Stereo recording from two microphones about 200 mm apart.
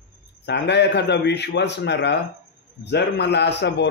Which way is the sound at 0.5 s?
55° left (ahead or behind).